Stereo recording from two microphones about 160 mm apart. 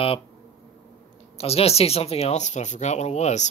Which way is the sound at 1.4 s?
40° left (ahead or behind).